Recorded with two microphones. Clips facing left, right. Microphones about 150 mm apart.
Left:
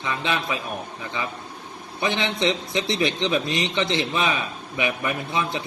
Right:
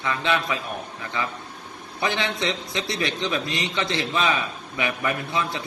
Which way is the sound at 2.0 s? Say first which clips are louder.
Left 2 dB; 20° left (ahead or behind).